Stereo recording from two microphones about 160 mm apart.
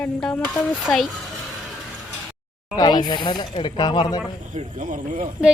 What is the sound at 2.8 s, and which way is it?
Speech, 25° left (ahead or behind).